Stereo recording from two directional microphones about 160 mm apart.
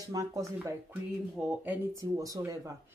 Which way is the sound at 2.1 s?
20° right (ahead or behind).